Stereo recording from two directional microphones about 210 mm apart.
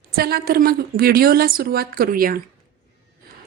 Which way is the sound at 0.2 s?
45° right (ahead or behind).